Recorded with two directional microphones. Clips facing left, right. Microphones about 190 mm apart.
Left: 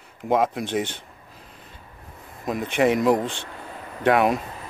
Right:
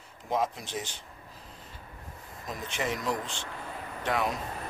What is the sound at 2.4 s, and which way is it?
Speech, 60° left (ahead or behind).